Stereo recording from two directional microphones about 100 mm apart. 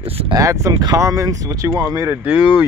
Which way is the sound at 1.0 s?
35° right (ahead or behind).